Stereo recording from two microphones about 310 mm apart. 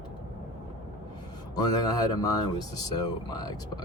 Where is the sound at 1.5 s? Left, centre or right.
Centre.